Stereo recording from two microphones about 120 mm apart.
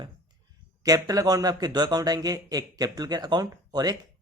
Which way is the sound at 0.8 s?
30° right (ahead or behind).